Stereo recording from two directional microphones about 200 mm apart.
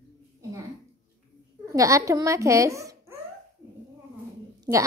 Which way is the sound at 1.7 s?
15° right (ahead or behind).